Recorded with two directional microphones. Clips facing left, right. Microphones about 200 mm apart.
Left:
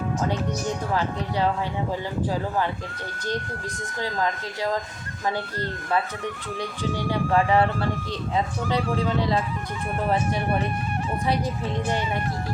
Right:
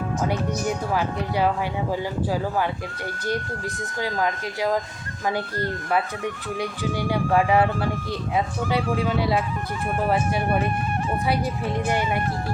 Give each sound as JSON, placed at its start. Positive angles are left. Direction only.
{"t": 4.0, "sound": "speech", "side_deg": -15}
{"t": 6.6, "sound": "speech", "side_deg": -10}